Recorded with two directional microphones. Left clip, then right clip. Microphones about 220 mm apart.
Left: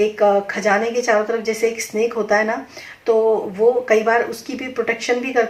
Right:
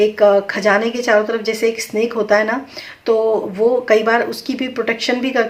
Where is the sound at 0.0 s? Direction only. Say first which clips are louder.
Right 3 dB; 35° right (ahead or behind).